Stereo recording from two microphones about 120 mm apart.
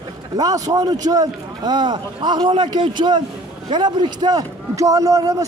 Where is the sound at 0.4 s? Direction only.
30° right (ahead or behind).